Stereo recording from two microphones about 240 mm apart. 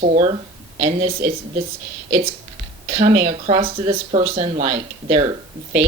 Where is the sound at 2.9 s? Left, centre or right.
Right.